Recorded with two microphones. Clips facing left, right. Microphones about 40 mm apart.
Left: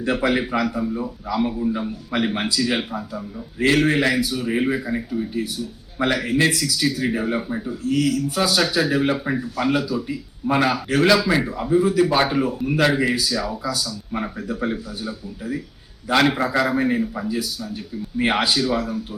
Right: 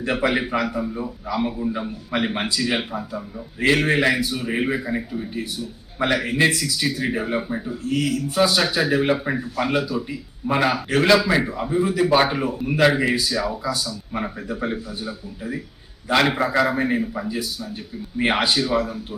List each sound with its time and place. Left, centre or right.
0.0 s a man's voice: centre